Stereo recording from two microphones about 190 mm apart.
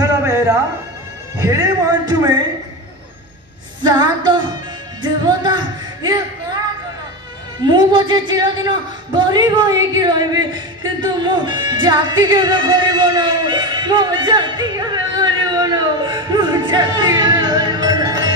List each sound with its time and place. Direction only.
0.0 s a sound: 15° right (ahead or behind)
1.4 s speech: 20° right (ahead or behind)
3.8 s music: 20° right (ahead or behind)
7.6 s speech: 25° right (ahead or behind)